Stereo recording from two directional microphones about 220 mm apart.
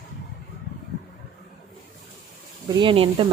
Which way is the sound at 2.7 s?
20° right (ahead or behind).